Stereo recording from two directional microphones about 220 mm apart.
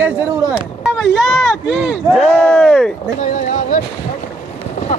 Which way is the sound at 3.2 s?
35° left (ahead or behind).